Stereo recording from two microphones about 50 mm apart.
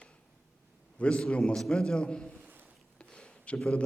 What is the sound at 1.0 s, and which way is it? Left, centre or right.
A man's voice, centre.